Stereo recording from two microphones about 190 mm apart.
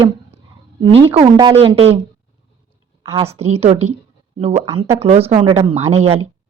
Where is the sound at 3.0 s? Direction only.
35° right (ahead or behind).